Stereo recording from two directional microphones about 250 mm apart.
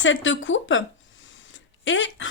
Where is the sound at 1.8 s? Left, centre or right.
Left.